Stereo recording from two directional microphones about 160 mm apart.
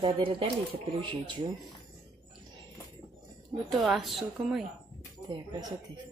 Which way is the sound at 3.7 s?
Centre (ahead or behind).